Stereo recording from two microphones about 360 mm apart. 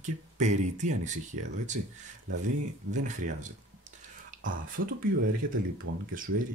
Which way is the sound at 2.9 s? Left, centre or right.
Right.